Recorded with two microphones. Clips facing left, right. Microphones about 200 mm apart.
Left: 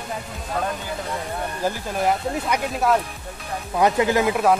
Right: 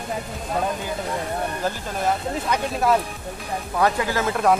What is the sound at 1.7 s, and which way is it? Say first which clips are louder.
Speech: left 4 dB; 10° left (ahead or behind).